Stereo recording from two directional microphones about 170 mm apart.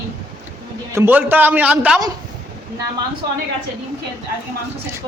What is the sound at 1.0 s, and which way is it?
A man's voice, 10° right (ahead or behind).